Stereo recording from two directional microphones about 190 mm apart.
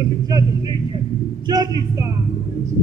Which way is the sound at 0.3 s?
20° right (ahead or behind).